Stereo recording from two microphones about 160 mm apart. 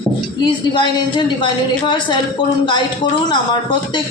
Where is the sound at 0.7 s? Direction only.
30° left (ahead or behind).